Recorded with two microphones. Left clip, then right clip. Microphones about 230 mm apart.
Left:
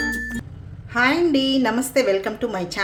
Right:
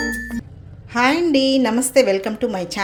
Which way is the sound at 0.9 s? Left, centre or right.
Right.